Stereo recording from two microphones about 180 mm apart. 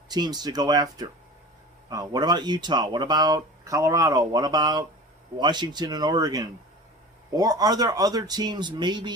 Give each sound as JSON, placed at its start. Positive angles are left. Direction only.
{"t": 0.1, "sound": "speech", "side_deg": -25}